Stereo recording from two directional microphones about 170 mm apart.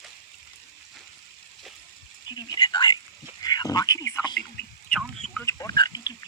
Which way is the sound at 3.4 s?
25° left (ahead or behind).